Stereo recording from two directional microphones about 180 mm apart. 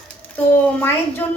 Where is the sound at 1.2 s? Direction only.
10° left (ahead or behind).